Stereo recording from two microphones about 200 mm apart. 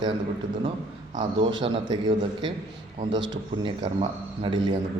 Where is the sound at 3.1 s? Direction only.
25° right (ahead or behind).